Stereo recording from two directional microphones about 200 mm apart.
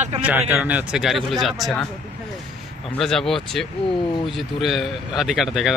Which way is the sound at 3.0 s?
Centre (ahead or behind).